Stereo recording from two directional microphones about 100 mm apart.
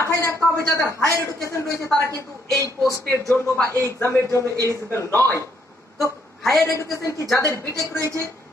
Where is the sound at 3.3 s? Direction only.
20° left (ahead or behind).